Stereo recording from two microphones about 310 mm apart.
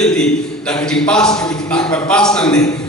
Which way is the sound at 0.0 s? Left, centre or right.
Centre.